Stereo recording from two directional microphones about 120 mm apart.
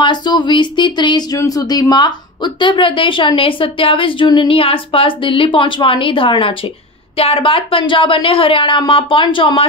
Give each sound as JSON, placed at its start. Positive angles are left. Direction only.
{"t": 0.0, "sound": "a woman's voice", "side_deg": 40}